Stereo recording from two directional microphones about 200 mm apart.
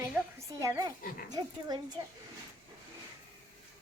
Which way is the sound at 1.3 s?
20° right (ahead or behind).